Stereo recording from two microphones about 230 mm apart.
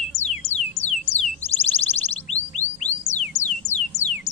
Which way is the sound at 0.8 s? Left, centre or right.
Left.